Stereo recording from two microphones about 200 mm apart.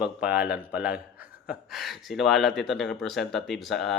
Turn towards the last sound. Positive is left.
turn(degrees=0)  # may be behind; listen again after turning